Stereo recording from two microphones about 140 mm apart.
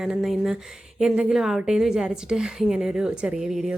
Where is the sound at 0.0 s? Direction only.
5° right (ahead or behind).